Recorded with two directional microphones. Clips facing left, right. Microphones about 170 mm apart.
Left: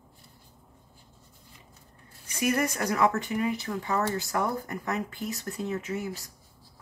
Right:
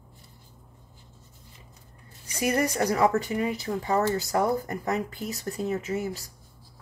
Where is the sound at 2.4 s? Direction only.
35° right (ahead or behind).